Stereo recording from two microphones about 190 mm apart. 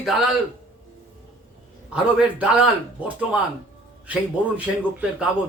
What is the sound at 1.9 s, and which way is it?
Speech, 5° right (ahead or behind).